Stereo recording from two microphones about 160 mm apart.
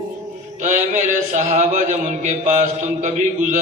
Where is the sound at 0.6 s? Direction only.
50° right (ahead or behind).